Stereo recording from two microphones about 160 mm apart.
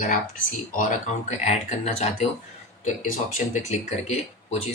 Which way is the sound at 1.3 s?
45° left (ahead or behind).